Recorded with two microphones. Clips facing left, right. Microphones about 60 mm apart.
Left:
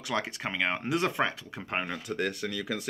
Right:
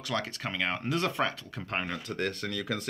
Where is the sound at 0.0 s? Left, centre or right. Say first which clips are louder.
Left 1 dB; centre.